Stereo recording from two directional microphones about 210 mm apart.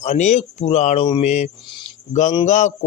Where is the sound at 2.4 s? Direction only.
35° left (ahead or behind).